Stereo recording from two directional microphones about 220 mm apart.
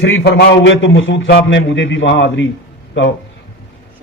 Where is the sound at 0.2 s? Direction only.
50° left (ahead or behind).